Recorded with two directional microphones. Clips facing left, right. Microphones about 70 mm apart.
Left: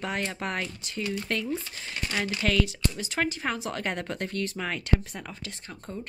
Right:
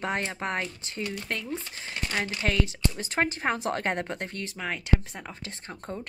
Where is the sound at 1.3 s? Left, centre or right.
Centre.